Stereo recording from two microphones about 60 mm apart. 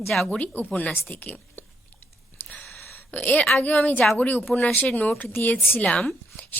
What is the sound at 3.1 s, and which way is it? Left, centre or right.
A woman's voice, left.